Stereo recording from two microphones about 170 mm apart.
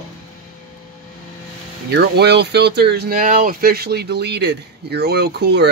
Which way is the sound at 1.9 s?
75° right (ahead or behind).